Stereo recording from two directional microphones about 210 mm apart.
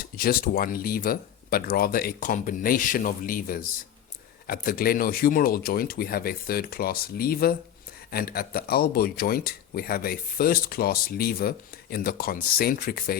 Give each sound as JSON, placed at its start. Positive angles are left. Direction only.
{"t": 0.0, "sound": "speech", "side_deg": 45}